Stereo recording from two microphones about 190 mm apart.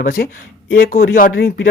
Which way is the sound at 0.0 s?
50° left (ahead or behind).